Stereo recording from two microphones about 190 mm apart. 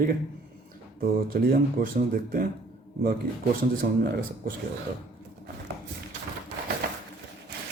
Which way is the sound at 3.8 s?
50° right (ahead or behind).